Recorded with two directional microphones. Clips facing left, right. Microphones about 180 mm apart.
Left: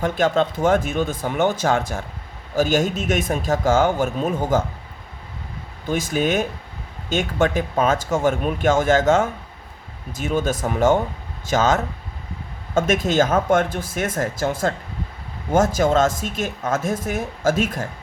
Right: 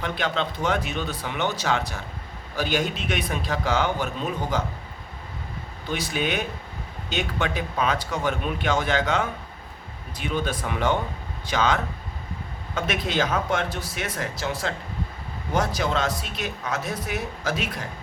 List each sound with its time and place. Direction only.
0.0 s speech: 45° left (ahead or behind)
5.9 s speech: 45° left (ahead or behind)